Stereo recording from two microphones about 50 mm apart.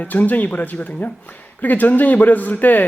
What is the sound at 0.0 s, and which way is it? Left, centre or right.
Speech, left.